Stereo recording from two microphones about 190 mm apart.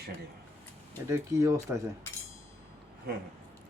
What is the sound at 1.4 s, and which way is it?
Speech, 15° right (ahead or behind).